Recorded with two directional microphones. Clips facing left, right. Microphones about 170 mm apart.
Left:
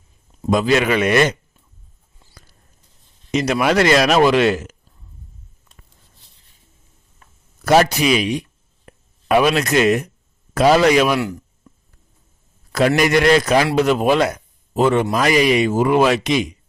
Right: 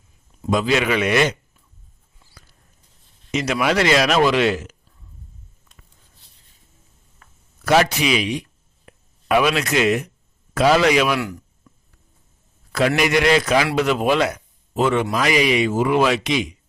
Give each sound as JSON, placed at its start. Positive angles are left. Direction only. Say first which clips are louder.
{"t": 0.4, "sound": "speech", "louder": "left 3 dB", "side_deg": 45}
{"t": 3.3, "sound": "speech", "louder": "left 3 dB", "side_deg": 40}
{"t": 7.2, "sound": "a man's voice", "louder": "left 4 dB", "side_deg": 40}
{"t": 13.0, "sound": "a man's voice", "louder": "left 3 dB", "side_deg": 45}